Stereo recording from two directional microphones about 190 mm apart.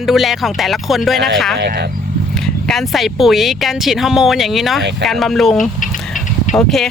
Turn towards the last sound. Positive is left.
turn(degrees=0)  # may be behind; listen again after turning